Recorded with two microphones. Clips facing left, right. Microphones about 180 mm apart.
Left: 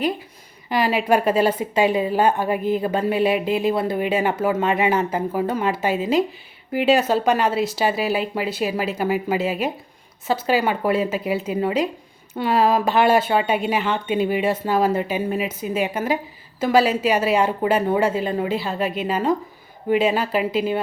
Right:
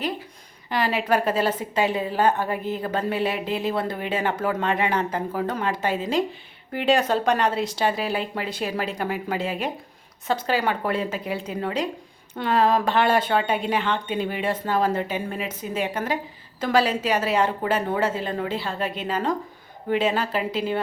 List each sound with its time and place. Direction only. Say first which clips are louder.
0.7 s a woman's voice: left 4 dB; 10° left (ahead or behind)